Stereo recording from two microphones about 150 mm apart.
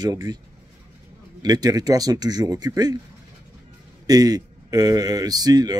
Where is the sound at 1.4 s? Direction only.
25° right (ahead or behind).